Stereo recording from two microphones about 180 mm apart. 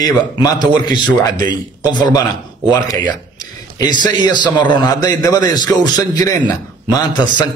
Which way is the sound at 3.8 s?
25° left (ahead or behind).